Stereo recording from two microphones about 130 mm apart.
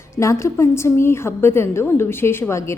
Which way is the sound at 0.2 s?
25° left (ahead or behind).